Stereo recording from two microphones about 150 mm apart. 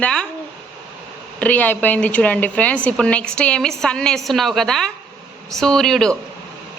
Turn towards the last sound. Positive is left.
turn(degrees=5)  # may be behind; listen again after turning